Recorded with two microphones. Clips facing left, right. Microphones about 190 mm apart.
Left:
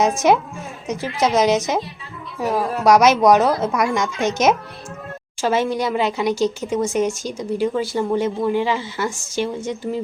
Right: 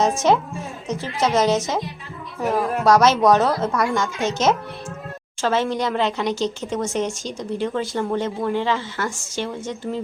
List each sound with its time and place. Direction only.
0.2 s speech: 10° left (ahead or behind)